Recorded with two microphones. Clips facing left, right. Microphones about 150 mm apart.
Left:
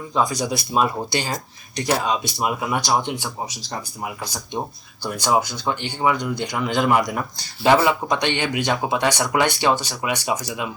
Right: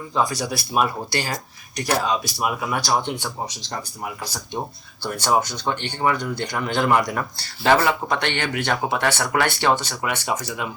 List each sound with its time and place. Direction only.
0.1 s speech: 20° left (ahead or behind)